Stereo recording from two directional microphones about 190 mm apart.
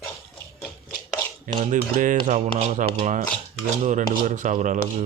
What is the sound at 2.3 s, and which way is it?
Stir, 40° right (ahead or behind).